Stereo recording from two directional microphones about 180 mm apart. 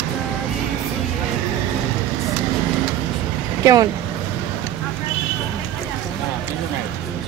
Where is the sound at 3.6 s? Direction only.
20° right (ahead or behind).